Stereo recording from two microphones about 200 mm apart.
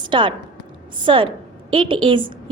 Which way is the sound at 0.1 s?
25° right (ahead or behind).